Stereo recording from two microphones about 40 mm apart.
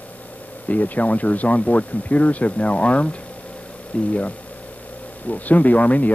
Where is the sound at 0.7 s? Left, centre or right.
Left.